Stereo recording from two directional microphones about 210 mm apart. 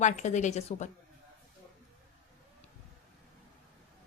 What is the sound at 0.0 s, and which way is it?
Speech, 35° left (ahead or behind).